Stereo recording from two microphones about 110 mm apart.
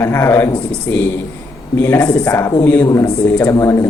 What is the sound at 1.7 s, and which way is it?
A man's voice, 20° left (ahead or behind).